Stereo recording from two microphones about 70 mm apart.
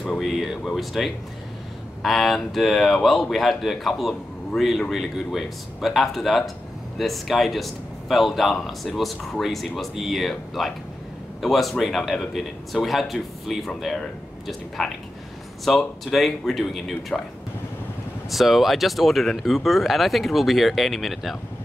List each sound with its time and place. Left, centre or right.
0.2 s speech: centre
17.1 s speech: centre
18.3 s speech: centre